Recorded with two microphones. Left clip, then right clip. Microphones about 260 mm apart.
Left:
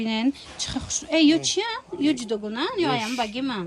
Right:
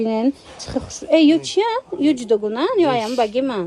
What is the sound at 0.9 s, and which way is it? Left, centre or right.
A woman's voice, centre.